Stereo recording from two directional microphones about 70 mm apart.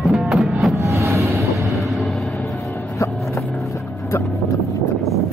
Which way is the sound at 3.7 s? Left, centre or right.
Left.